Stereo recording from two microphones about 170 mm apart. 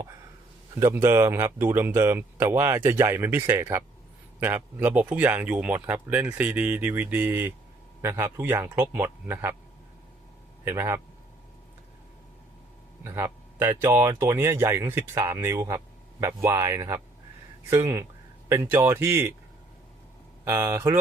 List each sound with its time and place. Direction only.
0.8 s speech: 15° right (ahead or behind)
10.7 s speech: 15° right (ahead or behind)
13.1 s speech: 15° right (ahead or behind)
20.4 s speech: 15° right (ahead or behind)